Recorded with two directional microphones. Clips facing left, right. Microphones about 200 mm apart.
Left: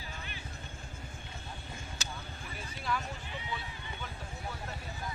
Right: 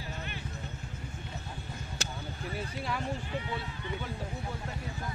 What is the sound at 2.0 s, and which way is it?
Basketball bounce, 65° right (ahead or behind).